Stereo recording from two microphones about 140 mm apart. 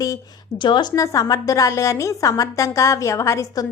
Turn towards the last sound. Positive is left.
turn(degrees=20)  # may be behind; listen again after turning